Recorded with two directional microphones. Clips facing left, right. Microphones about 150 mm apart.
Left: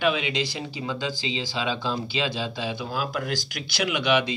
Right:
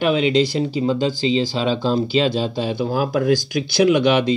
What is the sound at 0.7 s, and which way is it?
Speech, 35° right (ahead or behind).